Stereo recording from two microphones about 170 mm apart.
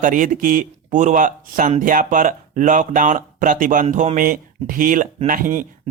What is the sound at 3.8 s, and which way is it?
Speech, 40° right (ahead or behind).